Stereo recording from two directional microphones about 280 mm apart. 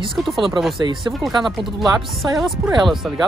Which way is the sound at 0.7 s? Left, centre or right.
Centre.